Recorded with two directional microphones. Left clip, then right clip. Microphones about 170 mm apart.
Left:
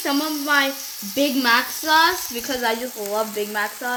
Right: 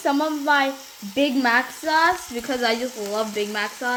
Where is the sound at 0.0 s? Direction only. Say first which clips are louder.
Right 2 dB; centre (ahead or behind).